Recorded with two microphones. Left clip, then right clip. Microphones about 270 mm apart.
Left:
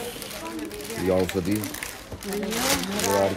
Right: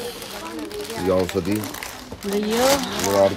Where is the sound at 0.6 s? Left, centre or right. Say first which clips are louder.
Right 3 dB; centre.